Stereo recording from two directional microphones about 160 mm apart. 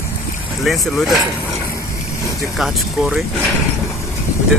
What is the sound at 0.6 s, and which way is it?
Speech, centre (ahead or behind).